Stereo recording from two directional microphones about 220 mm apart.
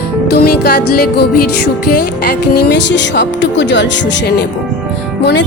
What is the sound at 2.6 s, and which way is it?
A woman's voice, 50° left (ahead or behind).